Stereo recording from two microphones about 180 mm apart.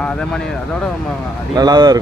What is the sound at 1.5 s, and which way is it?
Speech, 20° right (ahead or behind).